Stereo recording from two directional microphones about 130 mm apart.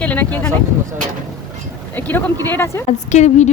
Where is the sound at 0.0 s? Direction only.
10° left (ahead or behind).